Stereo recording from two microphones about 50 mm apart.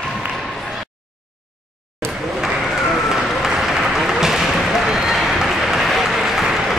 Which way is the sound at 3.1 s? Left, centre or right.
Centre.